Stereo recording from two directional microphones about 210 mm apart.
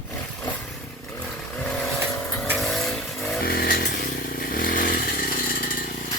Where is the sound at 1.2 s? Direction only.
5° left (ahead or behind).